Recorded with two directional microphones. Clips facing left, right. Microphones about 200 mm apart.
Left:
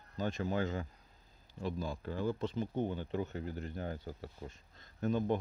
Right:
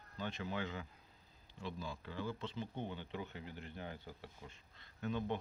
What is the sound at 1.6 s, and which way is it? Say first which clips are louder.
Speech: left 7 dB; 45° left (ahead or behind).